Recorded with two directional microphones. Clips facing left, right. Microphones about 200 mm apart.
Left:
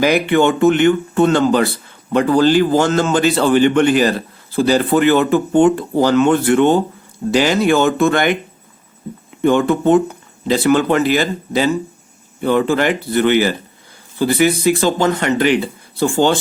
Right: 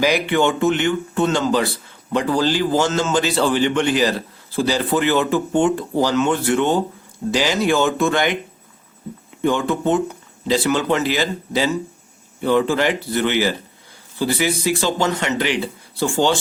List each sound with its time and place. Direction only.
0.0 s speech: 55° left (ahead or behind)
9.4 s speech: 55° left (ahead or behind)